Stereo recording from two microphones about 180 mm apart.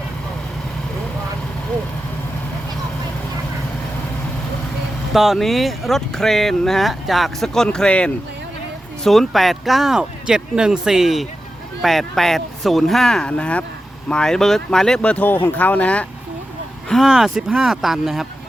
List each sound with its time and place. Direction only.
5.1 s speech: centre (ahead or behind)